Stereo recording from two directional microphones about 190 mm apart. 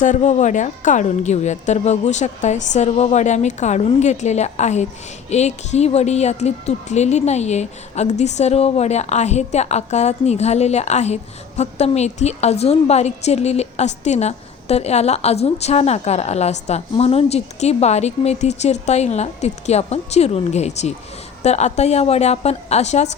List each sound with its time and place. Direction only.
0.0 s a woman's voice: 40° left (ahead or behind)